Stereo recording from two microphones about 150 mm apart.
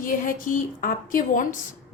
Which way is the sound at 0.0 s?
65° left (ahead or behind).